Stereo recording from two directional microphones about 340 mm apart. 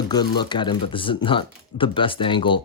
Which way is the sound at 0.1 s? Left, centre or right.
Centre.